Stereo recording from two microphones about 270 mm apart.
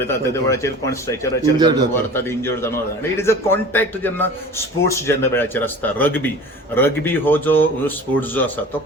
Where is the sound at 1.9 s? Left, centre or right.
Centre.